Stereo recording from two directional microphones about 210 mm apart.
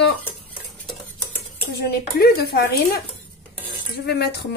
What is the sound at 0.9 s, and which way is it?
Cutlery, 5° left (ahead or behind).